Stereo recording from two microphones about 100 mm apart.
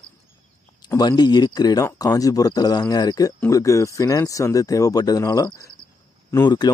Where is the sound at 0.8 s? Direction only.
45° left (ahead or behind).